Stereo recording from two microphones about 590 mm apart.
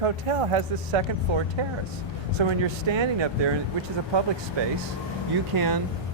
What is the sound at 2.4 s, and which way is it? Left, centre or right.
Speech, right.